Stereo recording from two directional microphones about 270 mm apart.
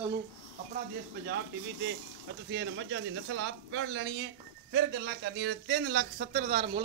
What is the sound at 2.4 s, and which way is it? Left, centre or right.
Speech, right.